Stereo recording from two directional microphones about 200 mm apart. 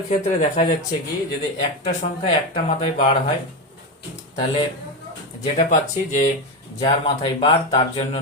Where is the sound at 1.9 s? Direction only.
30° left (ahead or behind).